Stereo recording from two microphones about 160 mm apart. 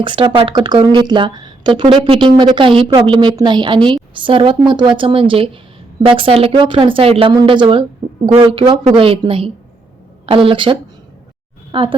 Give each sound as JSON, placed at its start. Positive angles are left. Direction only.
{"t": 0.0, "sound": "a woman's voice", "side_deg": -30}